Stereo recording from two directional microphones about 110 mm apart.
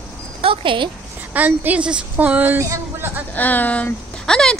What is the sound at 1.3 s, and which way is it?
A woman's voice, 15° right (ahead or behind).